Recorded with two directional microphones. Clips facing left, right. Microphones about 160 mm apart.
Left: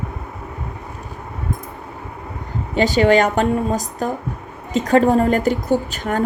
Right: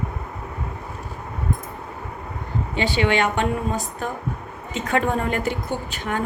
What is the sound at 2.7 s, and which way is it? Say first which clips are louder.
A woman's voice: left 7 dB; 40° left (ahead or behind).